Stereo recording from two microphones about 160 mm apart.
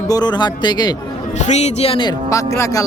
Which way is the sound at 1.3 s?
45° left (ahead or behind).